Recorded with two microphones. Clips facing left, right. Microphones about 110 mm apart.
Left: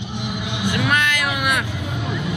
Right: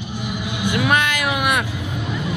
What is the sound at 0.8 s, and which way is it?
Speech, 15° right (ahead or behind).